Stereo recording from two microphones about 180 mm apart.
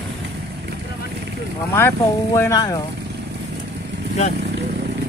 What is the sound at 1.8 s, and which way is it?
Speech, 15° left (ahead or behind).